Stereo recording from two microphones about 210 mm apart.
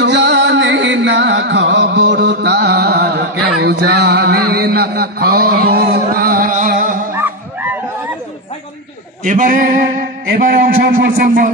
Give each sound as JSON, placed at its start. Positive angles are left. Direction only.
{"t": 0.0, "sound": "music", "side_deg": -55}
{"t": 7.2, "sound": "dog", "side_deg": -10}
{"t": 9.2, "sound": "music", "side_deg": -40}
{"t": 10.2, "sound": "a man's voice", "side_deg": -45}
{"t": 11.1, "sound": "music", "side_deg": -40}